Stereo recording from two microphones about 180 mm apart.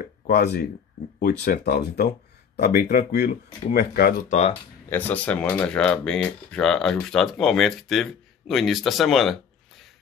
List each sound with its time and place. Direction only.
0.0 s a sound: 60° left (ahead or behind)
1.2 s speech: 60° left (ahead or behind)
4.3 s speech: 40° left (ahead or behind)
4.8 s speech: 10° left (ahead or behind)